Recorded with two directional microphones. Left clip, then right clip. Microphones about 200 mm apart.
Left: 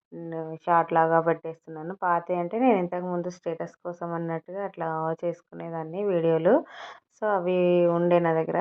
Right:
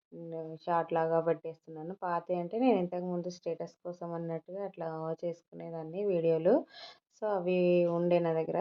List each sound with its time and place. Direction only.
0.3 s speech: 15° left (ahead or behind)